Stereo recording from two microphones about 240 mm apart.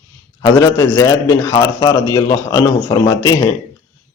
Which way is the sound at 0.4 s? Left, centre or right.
Centre.